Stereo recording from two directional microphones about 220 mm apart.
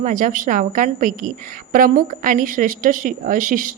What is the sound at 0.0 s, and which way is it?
A woman's voice, 35° right (ahead or behind).